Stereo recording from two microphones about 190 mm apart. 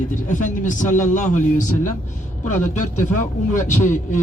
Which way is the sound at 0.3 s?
40° left (ahead or behind).